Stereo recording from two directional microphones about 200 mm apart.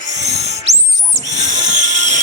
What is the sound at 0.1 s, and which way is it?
Owl, 35° right (ahead or behind).